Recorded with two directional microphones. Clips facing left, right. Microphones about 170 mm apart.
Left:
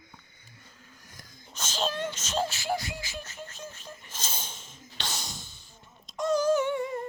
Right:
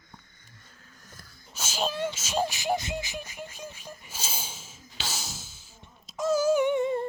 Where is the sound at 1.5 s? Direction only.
10° right (ahead or behind).